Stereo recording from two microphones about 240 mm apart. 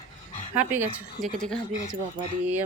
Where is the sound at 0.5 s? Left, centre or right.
Centre.